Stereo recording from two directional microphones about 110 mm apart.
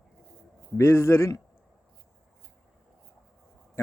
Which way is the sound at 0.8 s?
25° left (ahead or behind).